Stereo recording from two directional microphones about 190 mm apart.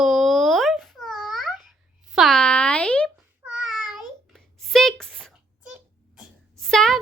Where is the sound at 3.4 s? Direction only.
5° right (ahead or behind).